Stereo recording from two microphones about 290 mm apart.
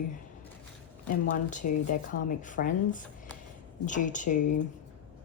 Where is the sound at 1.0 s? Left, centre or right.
Left.